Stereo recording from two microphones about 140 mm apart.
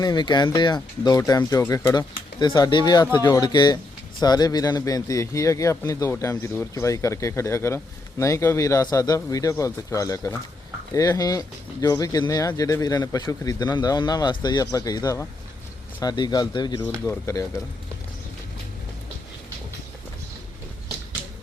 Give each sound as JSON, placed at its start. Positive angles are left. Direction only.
{"t": 0.0, "sound": "speech", "side_deg": 30}
{"t": 17.1, "sound": "speech", "side_deg": 20}